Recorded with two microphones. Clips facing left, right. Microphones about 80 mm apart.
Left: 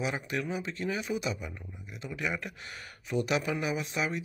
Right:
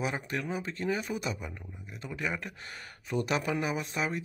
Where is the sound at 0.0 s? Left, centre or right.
Right.